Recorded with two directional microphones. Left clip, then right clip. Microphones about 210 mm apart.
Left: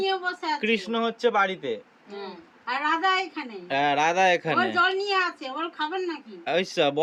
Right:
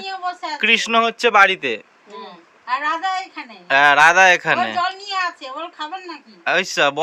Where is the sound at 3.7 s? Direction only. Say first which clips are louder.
Right 11 dB; 5° left (ahead or behind).